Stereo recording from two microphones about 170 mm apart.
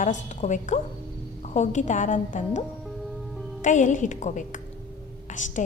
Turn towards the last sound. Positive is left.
turn(degrees=45)  # may be behind; listen again after turning